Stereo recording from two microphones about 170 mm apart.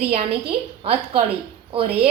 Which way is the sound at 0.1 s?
35° right (ahead or behind).